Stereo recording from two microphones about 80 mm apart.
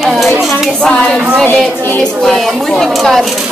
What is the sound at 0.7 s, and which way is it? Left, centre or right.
Speech, centre.